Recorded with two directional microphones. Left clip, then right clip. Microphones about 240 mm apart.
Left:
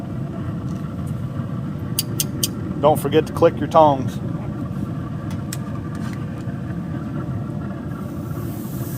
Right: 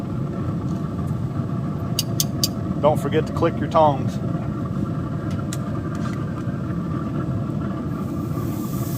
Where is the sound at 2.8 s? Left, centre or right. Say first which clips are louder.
Left 3 dB; left.